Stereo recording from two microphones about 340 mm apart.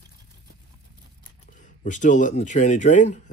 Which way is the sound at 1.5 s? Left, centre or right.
Left.